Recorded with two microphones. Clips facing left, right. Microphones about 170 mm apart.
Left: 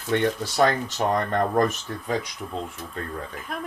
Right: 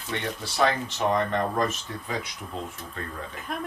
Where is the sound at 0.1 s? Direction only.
45° left (ahead or behind).